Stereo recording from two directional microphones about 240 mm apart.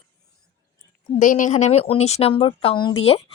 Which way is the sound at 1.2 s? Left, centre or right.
Left.